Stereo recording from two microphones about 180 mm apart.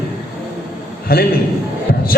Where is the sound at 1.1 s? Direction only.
55° left (ahead or behind).